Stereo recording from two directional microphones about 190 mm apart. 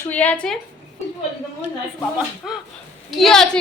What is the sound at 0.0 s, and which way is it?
Speech, 10° left (ahead or behind).